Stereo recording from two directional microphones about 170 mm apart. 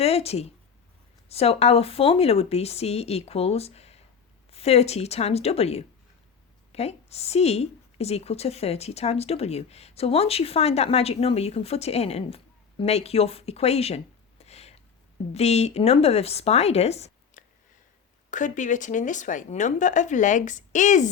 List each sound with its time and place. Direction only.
0.0 s a woman's voice: 35° left (ahead or behind)